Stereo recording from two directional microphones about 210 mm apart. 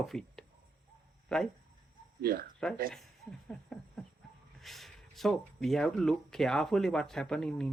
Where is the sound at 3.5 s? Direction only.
5° left (ahead or behind).